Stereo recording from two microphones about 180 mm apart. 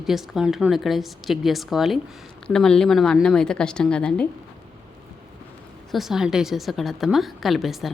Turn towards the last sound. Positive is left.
turn(degrees=0)  # may be behind; listen again after turning